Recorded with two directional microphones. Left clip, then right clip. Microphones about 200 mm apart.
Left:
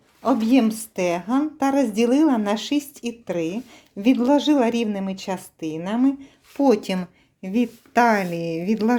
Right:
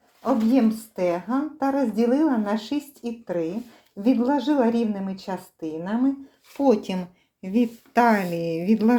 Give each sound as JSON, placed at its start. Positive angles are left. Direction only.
{"t": 0.2, "sound": "a woman's voice", "side_deg": 30}